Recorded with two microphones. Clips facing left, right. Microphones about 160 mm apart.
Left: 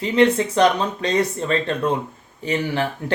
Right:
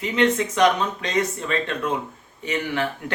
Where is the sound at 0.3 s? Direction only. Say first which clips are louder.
Left 2 dB; 30° left (ahead or behind).